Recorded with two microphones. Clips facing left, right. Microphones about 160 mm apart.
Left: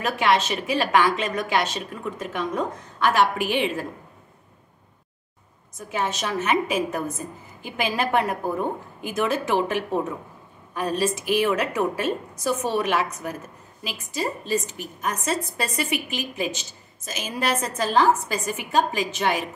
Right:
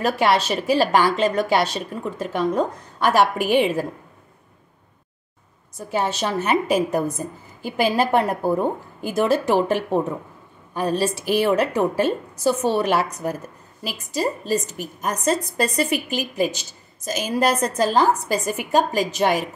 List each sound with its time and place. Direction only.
0.0 s a woman's voice: 35° right (ahead or behind)
5.8 s a woman's voice: 35° right (ahead or behind)